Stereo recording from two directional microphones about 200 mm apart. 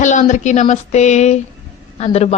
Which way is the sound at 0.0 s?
35° left (ahead or behind).